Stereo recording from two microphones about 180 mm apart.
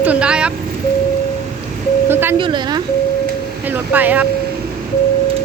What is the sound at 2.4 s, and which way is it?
Speech, 25° right (ahead or behind).